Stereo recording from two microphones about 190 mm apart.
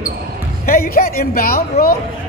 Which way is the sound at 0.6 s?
50° left (ahead or behind).